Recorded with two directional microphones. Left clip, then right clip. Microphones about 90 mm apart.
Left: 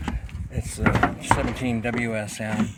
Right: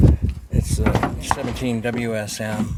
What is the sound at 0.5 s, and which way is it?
Door, 25° right (ahead or behind).